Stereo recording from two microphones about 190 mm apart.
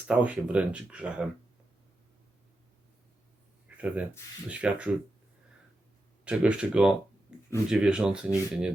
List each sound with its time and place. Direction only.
0.1 s speech: 5° right (ahead or behind)
3.8 s speech: 5° right (ahead or behind)
6.2 s speech: 5° right (ahead or behind)